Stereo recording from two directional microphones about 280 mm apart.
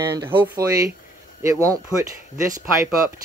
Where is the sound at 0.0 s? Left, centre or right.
Centre.